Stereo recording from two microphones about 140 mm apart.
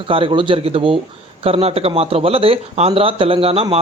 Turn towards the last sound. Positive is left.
turn(degrees=-45)  # may be behind; listen again after turning